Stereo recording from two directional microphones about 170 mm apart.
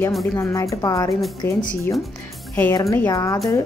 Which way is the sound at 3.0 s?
20° left (ahead or behind).